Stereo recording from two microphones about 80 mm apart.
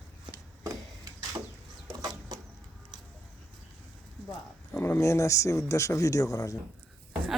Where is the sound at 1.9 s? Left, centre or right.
Right.